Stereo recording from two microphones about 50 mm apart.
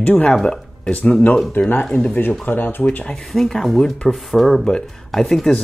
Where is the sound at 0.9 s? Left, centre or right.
Left.